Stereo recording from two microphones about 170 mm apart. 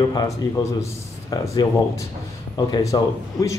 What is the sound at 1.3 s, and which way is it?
Speech, 20° left (ahead or behind).